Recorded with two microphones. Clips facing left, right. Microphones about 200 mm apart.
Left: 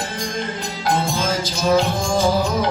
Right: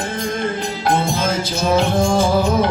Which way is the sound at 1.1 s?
55° right (ahead or behind).